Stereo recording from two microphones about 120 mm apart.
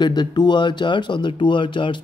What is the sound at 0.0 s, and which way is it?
Speech, 40° left (ahead or behind).